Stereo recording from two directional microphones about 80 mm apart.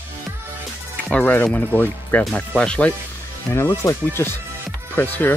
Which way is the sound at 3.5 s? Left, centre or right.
Left.